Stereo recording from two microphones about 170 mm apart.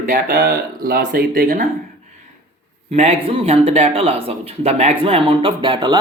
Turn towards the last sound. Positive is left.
turn(degrees=-25)  # may be behind; listen again after turning